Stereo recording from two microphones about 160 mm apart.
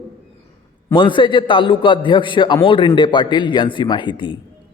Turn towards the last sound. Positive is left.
turn(degrees=30)  # may be behind; listen again after turning